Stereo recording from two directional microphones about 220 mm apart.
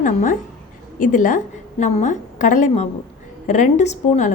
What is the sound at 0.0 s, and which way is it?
A woman's voice, 35° left (ahead or behind).